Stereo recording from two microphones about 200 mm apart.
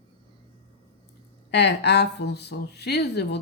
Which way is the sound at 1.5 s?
60° left (ahead or behind).